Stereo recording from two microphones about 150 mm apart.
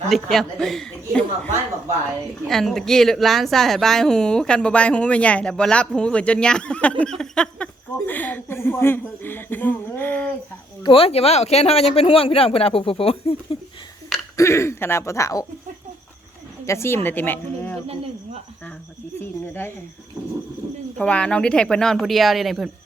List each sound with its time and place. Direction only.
0.1 s a woman's voice: centre (ahead or behind)
2.5 s a woman's voice: centre (ahead or behind)
10.8 s speech: 40° left (ahead or behind)
14.3 s speech: 20° left (ahead or behind)
16.6 s speech: 15° left (ahead or behind)
19.2 s speech: 15° left (ahead or behind)
21.0 s a woman's voice: 10° left (ahead or behind)